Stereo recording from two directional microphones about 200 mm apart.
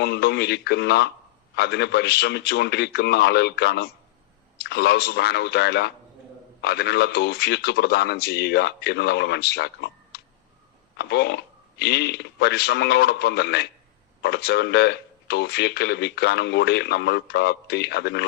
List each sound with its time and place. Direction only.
0.0 s speech: 55° left (ahead or behind)